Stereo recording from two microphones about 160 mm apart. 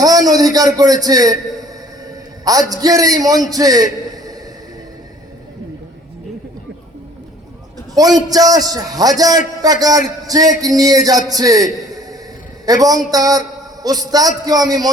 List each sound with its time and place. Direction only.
0.0 s a man's voice: 25° right (ahead or behind)
7.9 s a man's voice: 25° right (ahead or behind)